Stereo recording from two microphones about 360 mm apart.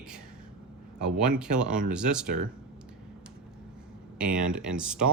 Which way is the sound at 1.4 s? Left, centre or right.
Centre.